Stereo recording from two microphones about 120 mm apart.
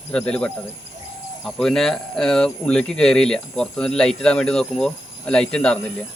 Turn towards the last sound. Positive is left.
turn(degrees=10)  # may be behind; listen again after turning